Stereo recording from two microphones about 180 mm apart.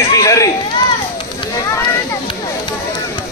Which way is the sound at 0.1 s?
20° left (ahead or behind).